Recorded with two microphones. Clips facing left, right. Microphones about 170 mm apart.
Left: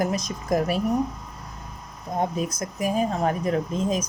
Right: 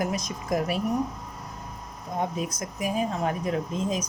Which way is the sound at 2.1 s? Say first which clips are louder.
Left 3 dB; 40° left (ahead or behind).